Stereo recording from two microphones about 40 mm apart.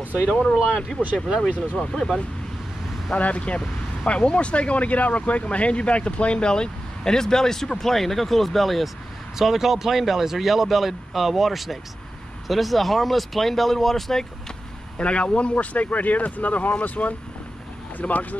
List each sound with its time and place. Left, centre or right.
0.4 s speech: centre
3.2 s speech: left; by 14.2 s centre
15.0 s speech: left
15.5 s speech: left